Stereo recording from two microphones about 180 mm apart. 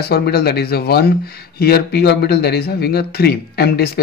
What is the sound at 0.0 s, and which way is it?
Speech, 60° left (ahead or behind).